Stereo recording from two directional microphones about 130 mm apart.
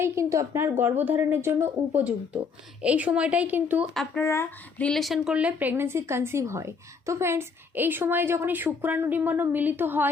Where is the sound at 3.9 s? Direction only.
Centre (ahead or behind).